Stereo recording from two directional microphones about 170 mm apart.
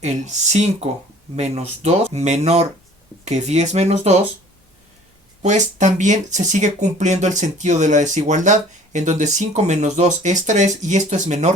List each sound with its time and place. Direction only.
0.0 s speech: 40° right (ahead or behind)
5.4 s speech: 45° right (ahead or behind)